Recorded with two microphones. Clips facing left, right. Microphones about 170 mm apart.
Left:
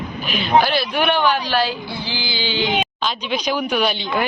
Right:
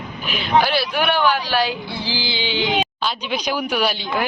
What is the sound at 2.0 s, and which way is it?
A woman's voice, 30° right (ahead or behind).